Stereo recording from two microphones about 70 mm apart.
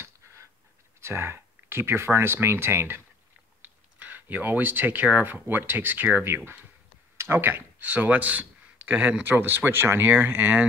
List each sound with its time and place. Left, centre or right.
1.0 s speech: right
3.6 s speech: right